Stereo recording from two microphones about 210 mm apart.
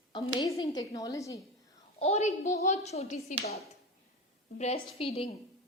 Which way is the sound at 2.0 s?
30° left (ahead or behind).